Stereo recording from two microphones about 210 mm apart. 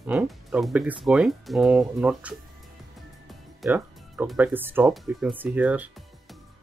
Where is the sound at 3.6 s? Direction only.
5° right (ahead or behind).